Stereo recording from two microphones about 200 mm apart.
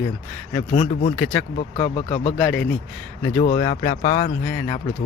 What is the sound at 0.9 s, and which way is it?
Speech, 30° left (ahead or behind).